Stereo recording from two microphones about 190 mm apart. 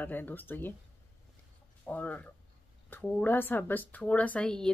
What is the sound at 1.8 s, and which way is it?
A woman's voice, 5° left (ahead or behind).